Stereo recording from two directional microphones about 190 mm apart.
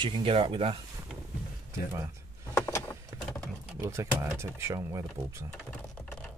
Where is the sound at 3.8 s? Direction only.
15° right (ahead or behind).